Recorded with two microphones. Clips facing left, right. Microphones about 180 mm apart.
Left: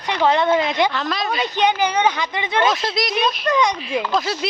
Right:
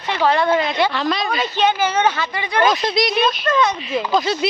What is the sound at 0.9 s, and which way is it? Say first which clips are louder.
Speech: right 2 dB; centre (ahead or behind).